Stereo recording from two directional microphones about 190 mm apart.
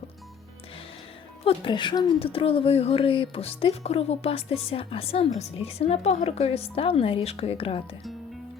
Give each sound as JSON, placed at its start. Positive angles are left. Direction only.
{"t": 1.5, "sound": "speech", "side_deg": 25}